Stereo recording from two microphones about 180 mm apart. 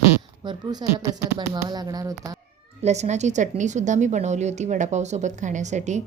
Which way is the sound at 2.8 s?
40° right (ahead or behind).